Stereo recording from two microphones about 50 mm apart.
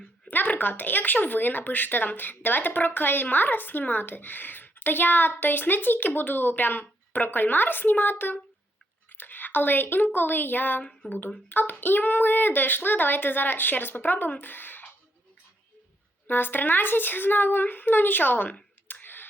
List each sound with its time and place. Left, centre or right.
0.3 s speech: left
16.2 s speech: left
18.9 s a sound: left